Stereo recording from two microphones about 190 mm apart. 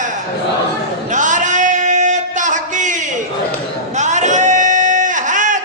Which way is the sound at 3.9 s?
40° right (ahead or behind).